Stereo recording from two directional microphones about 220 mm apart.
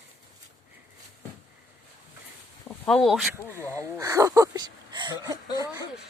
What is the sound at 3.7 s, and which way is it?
A woman's voice, 15° right (ahead or behind).